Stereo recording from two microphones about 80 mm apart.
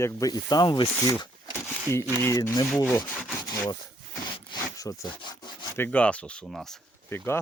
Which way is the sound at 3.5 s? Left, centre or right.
Left.